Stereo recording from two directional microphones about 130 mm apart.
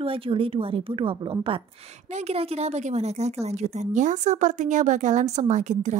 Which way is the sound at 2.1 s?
50° right (ahead or behind).